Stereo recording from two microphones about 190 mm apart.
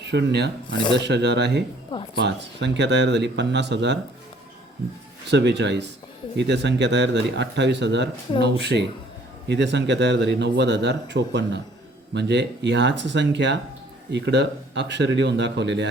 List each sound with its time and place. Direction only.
0.0 s speech: 65° right (ahead or behind)
5.3 s speech: 65° right (ahead or behind)